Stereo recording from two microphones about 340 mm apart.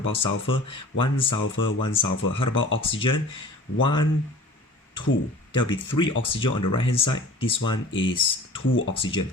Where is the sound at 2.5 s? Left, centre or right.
Left.